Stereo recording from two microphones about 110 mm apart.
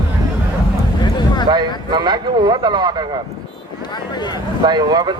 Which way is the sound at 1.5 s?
40° right (ahead or behind).